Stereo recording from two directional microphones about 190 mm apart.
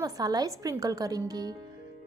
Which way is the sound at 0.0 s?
20° right (ahead or behind).